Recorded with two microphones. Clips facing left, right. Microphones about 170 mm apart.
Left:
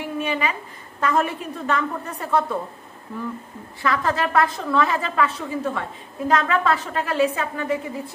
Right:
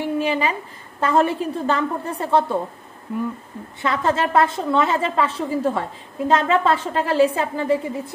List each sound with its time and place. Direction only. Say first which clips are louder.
0.0 s a woman's voice: right 4 dB; 30° right (ahead or behind)
3.8 s a woman's voice: right 2 dB; 25° right (ahead or behind)